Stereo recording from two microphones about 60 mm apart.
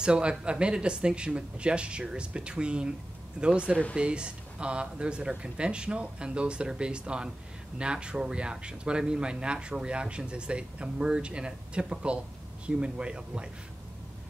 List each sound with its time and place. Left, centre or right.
0.0 s speech: centre